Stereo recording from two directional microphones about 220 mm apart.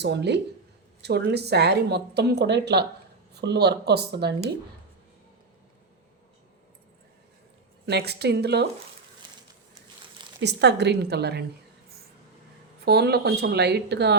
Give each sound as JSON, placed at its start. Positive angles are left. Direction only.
{"t": 0.0, "sound": "a woman's voice", "side_deg": -50}
{"t": 7.9, "sound": "a woman's voice", "side_deg": -50}
{"t": 10.4, "sound": "a woman's voice", "side_deg": -50}
{"t": 12.8, "sound": "a woman's voice", "side_deg": -45}